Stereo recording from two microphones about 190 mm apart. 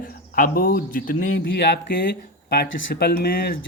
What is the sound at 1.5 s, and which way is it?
Speech, 60° left (ahead or behind).